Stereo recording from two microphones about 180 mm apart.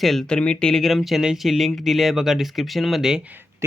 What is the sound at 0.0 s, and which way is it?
Speech, centre (ahead or behind).